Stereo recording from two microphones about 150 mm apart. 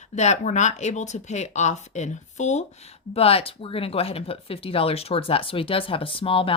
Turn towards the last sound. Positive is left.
turn(degrees=35)  # may be behind; listen again after turning